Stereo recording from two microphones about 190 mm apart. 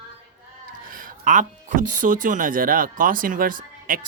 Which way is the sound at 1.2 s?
40° right (ahead or behind).